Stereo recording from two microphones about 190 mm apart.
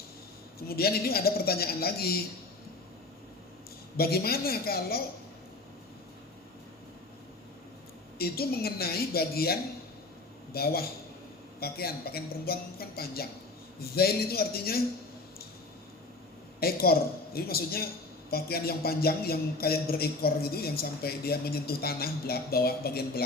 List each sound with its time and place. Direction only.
0.7 s speech: 55° left (ahead or behind)
3.9 s speech: 55° left (ahead or behind)
8.2 s speech: 55° left (ahead or behind)
16.6 s speech: 55° left (ahead or behind)